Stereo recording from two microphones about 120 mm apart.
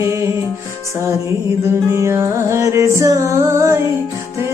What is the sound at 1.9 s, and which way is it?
Music, 20° right (ahead or behind).